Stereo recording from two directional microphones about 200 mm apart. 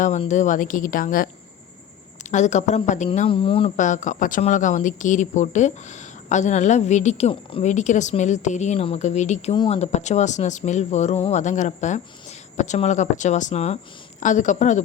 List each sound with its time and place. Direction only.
0.0 s speech: 35° left (ahead or behind)
2.3 s speech: 35° left (ahead or behind)